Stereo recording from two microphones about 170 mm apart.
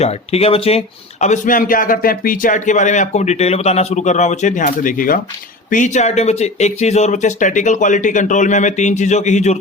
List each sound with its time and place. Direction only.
0.0 s speech: 40° left (ahead or behind)